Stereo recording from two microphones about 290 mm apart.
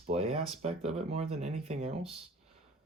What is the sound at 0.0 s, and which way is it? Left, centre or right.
Speech, right.